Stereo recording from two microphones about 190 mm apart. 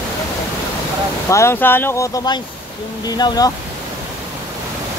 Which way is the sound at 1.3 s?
15° left (ahead or behind).